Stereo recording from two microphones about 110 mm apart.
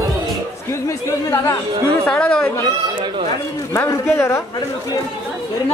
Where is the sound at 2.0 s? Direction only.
10° left (ahead or behind).